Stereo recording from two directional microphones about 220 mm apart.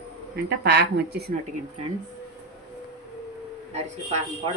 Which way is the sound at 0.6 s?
50° right (ahead or behind).